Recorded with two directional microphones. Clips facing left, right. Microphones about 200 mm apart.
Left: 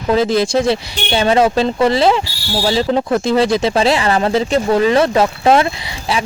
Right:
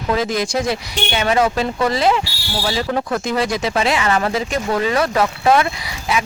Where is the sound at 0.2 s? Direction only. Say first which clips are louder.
Left 6 dB; 30° left (ahead or behind).